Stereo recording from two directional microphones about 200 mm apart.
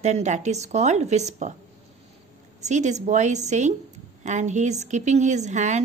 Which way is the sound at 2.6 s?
35° right (ahead or behind).